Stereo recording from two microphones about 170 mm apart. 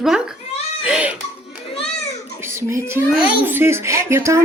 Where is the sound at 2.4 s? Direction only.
15° right (ahead or behind).